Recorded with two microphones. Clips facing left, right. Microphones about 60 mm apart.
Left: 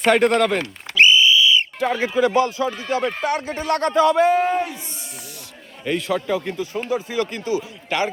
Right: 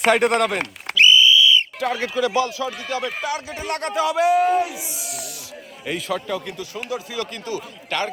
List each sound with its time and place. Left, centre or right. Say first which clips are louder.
0.0 s a man's voice: left 1 dB; centre
0.9 s whistle: even; left
1.8 s a man's voice: left 3 dB; centre
7.1 s speech: left 5 dB; left